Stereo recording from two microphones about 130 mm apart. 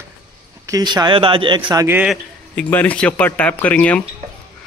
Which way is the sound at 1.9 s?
10° right (ahead or behind).